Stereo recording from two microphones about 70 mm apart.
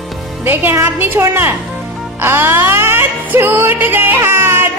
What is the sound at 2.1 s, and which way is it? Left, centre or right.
Music, right.